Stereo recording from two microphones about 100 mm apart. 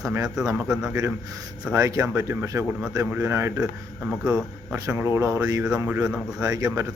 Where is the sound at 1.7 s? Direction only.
30° right (ahead or behind).